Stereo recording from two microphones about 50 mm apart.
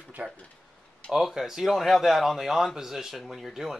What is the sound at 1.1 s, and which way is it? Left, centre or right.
Speech, centre.